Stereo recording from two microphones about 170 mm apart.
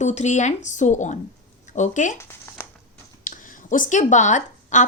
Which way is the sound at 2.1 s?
15° left (ahead or behind).